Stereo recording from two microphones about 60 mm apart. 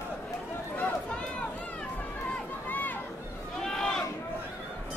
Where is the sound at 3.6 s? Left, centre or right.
Centre.